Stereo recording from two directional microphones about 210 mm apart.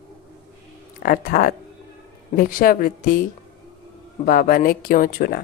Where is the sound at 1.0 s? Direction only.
45° left (ahead or behind).